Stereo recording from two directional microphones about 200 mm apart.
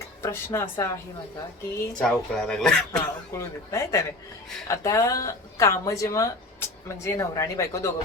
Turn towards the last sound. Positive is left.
turn(degrees=15)  # may be behind; listen again after turning